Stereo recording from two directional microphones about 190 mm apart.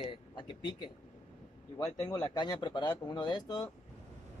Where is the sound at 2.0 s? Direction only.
20° left (ahead or behind).